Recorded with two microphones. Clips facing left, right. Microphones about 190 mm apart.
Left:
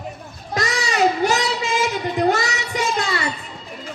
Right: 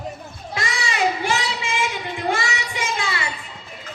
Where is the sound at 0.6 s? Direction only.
40° left (ahead or behind).